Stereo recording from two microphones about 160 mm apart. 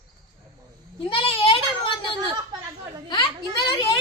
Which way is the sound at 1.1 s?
35° left (ahead or behind).